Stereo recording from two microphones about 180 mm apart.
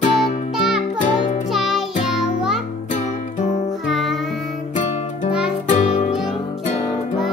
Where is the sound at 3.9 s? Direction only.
Centre (ahead or behind).